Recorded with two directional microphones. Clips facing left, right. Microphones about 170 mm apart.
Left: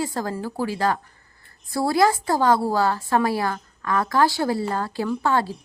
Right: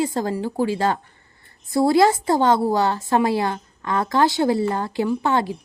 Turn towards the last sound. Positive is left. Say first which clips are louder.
# right 2 dB
turn(degrees=-20)  # may be behind; listen again after turning